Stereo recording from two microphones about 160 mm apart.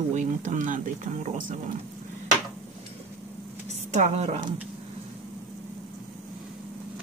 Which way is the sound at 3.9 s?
45° right (ahead or behind).